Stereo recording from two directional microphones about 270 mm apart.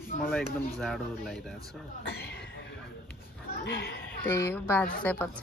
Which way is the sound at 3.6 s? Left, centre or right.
Left.